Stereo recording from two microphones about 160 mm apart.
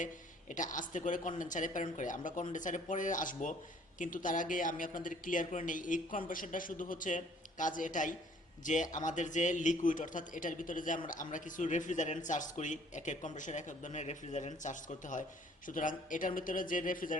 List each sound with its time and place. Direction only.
0.0 s a man's voice: 50° left (ahead or behind)